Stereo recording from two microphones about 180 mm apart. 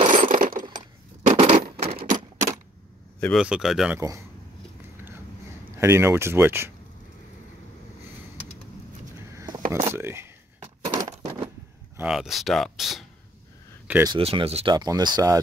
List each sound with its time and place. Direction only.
0.1 s coin: 45° right (ahead or behind)
1.3 s coin: 35° right (ahead or behind)
3.2 s speech: 5° left (ahead or behind)
5.8 s speech: 15° right (ahead or behind)
9.3 s a sound: 15° right (ahead or behind)
9.7 s coin: 15° right (ahead or behind)
11.1 s coin: 35° right (ahead or behind)
12.0 s speech: centre (ahead or behind)
14.0 s speech: 30° right (ahead or behind)